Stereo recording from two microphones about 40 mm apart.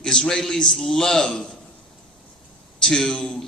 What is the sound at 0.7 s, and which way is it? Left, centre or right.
Speech, centre.